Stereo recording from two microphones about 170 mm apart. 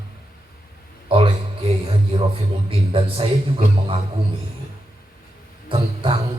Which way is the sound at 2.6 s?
35° right (ahead or behind).